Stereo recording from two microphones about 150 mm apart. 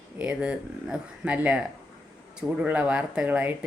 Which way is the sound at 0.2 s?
5° right (ahead or behind).